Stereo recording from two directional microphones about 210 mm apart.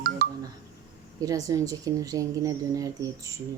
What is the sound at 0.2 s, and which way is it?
Music, 45° right (ahead or behind).